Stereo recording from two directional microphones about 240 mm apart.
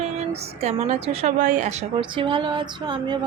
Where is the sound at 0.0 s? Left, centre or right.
Right.